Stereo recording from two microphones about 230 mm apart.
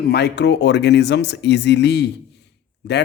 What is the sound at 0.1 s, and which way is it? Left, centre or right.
Speech, left.